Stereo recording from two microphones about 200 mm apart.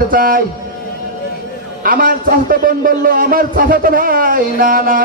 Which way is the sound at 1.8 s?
45° right (ahead or behind).